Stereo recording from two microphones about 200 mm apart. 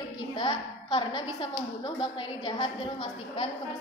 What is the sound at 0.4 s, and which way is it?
A woman's voice, 20° left (ahead or behind).